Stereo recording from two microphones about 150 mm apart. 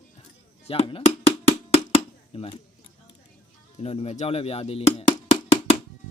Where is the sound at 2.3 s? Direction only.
40° left (ahead or behind).